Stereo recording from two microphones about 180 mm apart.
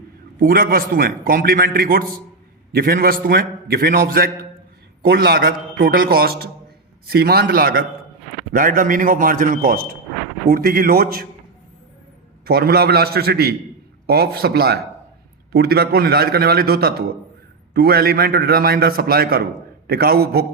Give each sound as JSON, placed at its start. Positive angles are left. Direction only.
{"t": 0.3, "sound": "a man's voice", "side_deg": -55}
{"t": 12.5, "sound": "a man's voice", "side_deg": -60}